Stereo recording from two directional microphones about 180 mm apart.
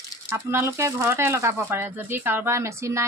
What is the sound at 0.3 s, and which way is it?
Speech, 15° right (ahead or behind).